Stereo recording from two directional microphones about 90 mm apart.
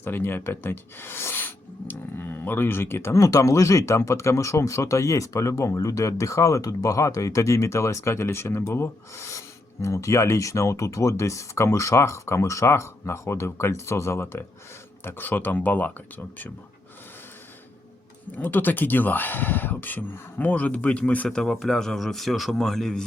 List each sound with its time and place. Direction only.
0.0 s speech: 25° left (ahead or behind)
3.2 s speech: 40° left (ahead or behind); by 16.5 s 20° left (ahead or behind)
18.3 s speech: 20° left (ahead or behind)
21.2 s a man's voice: 5° left (ahead or behind)